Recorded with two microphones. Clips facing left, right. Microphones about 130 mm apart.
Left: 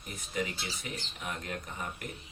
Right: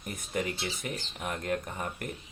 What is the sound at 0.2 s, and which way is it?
Speech, 50° right (ahead or behind).